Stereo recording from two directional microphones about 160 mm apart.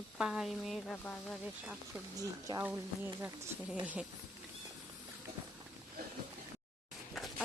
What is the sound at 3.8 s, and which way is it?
Speech, 10° right (ahead or behind).